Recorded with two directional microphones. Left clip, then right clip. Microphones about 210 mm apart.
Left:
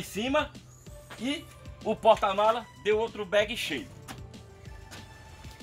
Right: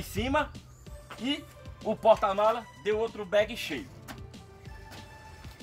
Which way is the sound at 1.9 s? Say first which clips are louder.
Even; 15° right (ahead or behind).